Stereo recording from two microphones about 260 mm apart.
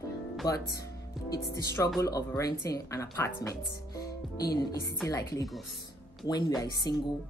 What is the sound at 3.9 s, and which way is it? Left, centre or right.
Music, centre.